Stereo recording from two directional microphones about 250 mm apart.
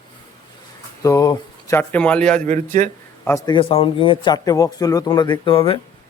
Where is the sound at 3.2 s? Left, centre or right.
Centre.